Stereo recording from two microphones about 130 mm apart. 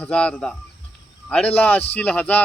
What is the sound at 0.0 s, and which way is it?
Speech, 10° left (ahead or behind).